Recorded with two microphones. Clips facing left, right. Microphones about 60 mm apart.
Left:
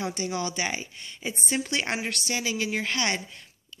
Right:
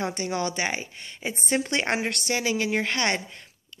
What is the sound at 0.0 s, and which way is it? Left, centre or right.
Speech, right.